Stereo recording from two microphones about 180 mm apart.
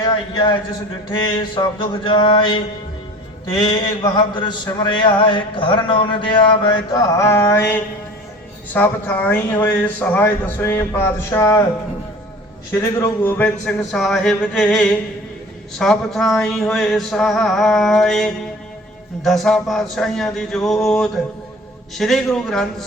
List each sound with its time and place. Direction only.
0.0 s a man's voice: 25° left (ahead or behind)
3.7 s a man's voice: 25° left (ahead or behind)
12.7 s a sound: 10° left (ahead or behind)